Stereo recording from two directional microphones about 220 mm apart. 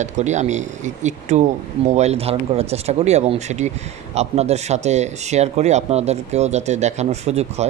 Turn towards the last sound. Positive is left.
turn(degrees=-30)  # may be behind; listen again after turning